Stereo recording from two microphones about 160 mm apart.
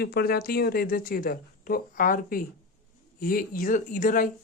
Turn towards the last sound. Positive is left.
turn(degrees=55)  # may be behind; listen again after turning